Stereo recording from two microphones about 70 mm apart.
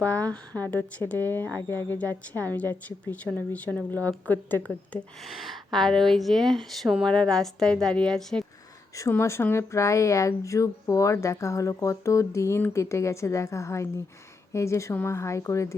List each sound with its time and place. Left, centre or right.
0.0 s speech: left
5.2 s a woman's voice: centre
9.0 s speech: left